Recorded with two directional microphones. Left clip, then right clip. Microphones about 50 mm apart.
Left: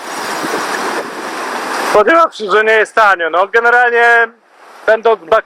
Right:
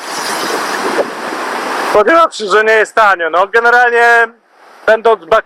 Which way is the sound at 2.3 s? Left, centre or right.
Right.